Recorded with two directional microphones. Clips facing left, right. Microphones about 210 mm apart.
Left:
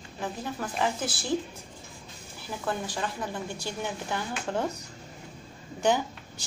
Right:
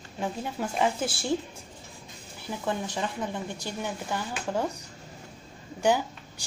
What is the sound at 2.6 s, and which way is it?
Speech, 20° right (ahead or behind).